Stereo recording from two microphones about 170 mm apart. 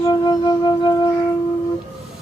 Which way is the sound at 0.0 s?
25° left (ahead or behind).